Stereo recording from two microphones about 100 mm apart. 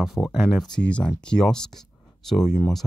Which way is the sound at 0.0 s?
5° right (ahead or behind).